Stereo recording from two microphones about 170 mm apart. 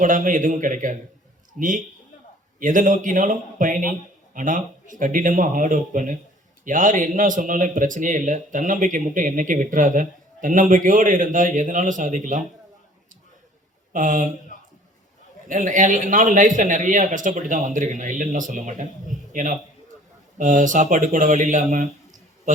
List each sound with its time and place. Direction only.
0.0 s speech: 50° right (ahead or behind)
13.9 s speech: 50° right (ahead or behind)
15.4 s a man's voice: 50° right (ahead or behind)